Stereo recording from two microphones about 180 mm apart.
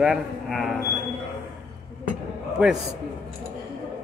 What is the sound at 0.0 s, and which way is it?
Speech, centre (ahead or behind).